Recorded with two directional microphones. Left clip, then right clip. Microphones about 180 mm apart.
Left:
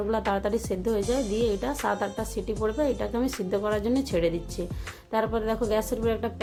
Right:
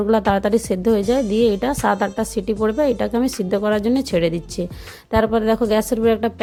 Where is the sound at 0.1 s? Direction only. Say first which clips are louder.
Right 10 dB; 40° right (ahead or behind).